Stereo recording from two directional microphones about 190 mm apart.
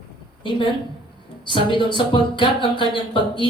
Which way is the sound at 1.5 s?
25° left (ahead or behind).